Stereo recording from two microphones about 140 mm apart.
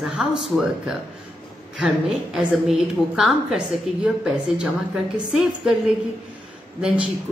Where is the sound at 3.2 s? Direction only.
5° right (ahead or behind).